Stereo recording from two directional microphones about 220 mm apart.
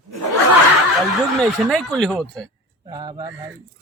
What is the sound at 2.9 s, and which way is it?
Speech, 20° right (ahead or behind).